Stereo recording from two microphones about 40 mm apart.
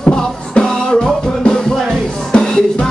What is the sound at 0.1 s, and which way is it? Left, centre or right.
Music, centre.